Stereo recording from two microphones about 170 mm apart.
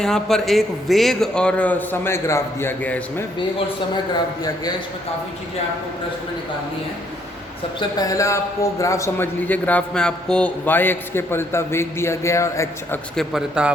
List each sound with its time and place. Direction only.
0.0 s a man's voice: 5° left (ahead or behind)
3.9 s speech: 25° left (ahead or behind)
7.8 s a man's voice: 20° left (ahead or behind)
13.1 s a man's voice: 5° right (ahead or behind)